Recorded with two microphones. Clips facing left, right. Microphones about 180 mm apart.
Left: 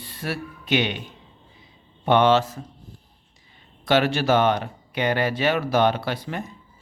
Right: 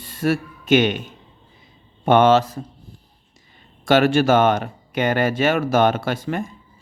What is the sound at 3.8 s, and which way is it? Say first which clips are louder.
Speech: right 5 dB; 50° right (ahead or behind).